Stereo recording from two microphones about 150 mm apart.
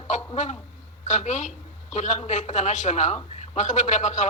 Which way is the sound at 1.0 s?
50° left (ahead or behind).